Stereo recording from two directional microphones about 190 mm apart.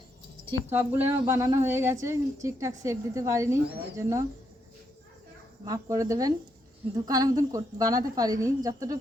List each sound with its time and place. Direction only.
0.7 s a woman's voice: 10° right (ahead or behind)
5.6 s a woman's voice: 15° right (ahead or behind)